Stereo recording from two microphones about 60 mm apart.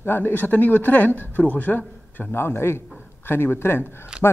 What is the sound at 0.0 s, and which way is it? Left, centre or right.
Speech, left.